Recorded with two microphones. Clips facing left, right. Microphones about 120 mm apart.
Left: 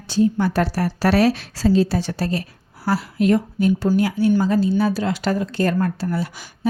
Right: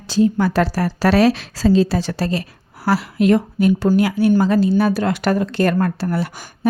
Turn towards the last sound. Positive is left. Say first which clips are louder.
# right 3 dB
turn(degrees=-65)  # may be behind; listen again after turning